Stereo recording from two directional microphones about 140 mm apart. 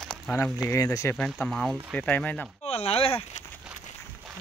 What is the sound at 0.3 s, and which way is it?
Speech, 20° left (ahead or behind).